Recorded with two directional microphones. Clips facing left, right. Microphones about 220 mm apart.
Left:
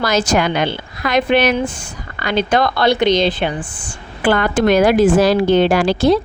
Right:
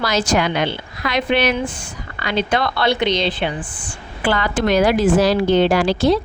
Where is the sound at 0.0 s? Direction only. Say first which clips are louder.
Left 2 dB; 45° left (ahead or behind).